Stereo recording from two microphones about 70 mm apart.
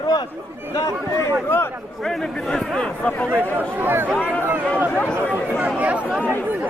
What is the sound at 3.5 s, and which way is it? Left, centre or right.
Speech, right.